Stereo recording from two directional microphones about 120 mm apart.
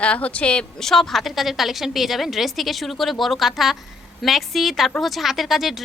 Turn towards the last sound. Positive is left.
turn(degrees=0)  # may be behind; listen again after turning